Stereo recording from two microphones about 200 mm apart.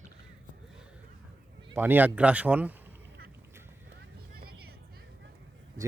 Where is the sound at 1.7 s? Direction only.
10° right (ahead or behind).